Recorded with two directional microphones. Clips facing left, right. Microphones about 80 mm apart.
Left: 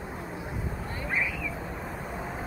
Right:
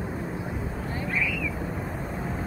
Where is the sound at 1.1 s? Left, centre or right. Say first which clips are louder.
Right 1 dB; left.